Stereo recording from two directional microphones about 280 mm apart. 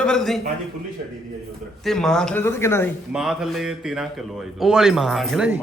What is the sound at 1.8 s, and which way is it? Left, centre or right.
A man's voice, centre.